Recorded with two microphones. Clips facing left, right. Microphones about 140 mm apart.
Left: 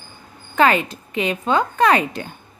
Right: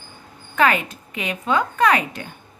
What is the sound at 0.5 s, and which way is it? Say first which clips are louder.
A woman's voice: left 3 dB; 30° left (ahead or behind).